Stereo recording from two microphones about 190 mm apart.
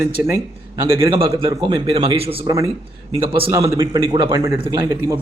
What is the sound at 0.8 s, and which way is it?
A man's voice, 20° right (ahead or behind).